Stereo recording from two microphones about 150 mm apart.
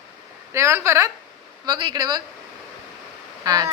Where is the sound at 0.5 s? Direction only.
20° right (ahead or behind).